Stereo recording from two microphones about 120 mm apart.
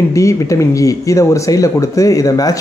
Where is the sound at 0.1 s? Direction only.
25° left (ahead or behind).